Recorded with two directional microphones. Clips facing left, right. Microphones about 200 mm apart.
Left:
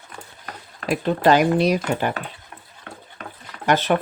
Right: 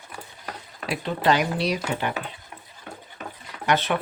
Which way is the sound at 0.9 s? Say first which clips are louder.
Left 5 dB; 45° left (ahead or behind).